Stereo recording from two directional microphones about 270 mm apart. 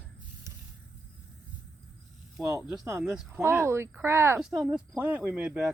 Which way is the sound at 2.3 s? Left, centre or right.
Centre.